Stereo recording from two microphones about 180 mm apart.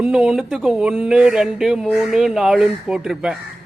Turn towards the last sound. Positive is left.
turn(degrees=-5)  # may be behind; listen again after turning